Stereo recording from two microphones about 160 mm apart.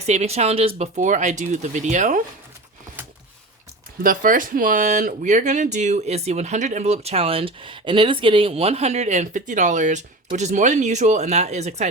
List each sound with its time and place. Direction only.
0.0 s speech: 45° right (ahead or behind)
4.0 s speech: 60° right (ahead or behind)